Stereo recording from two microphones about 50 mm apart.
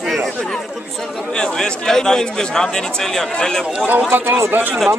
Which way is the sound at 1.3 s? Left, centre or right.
Centre.